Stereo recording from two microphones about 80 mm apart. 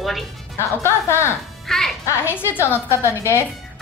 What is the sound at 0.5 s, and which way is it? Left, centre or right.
Speech, left.